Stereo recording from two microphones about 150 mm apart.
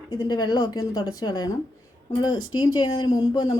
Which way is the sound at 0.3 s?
30° left (ahead or behind).